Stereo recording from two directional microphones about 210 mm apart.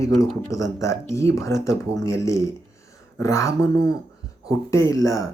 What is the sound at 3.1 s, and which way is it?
Speech, 15° left (ahead or behind).